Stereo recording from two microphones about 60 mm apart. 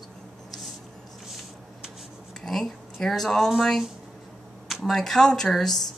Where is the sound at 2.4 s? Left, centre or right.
Centre.